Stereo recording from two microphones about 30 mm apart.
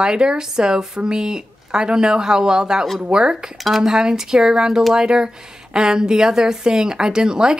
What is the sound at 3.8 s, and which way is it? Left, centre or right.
A woman's voice, centre.